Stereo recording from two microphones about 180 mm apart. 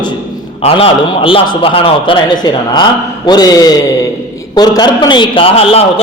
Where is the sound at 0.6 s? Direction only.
30° left (ahead or behind).